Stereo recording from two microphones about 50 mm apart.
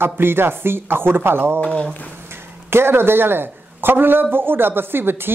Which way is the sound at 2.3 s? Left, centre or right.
Right.